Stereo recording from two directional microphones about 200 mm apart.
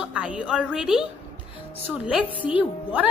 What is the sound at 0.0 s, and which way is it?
A woman's voice, 5° right (ahead or behind).